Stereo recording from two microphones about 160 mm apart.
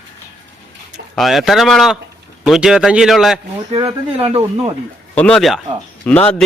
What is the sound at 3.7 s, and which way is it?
Speech, 35° right (ahead or behind).